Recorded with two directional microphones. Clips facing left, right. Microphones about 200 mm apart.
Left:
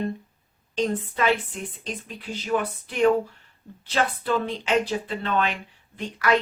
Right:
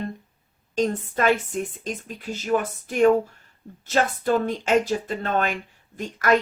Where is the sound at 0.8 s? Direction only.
45° right (ahead or behind).